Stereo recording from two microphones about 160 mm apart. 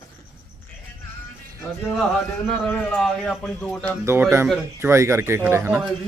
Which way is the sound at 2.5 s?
5° left (ahead or behind).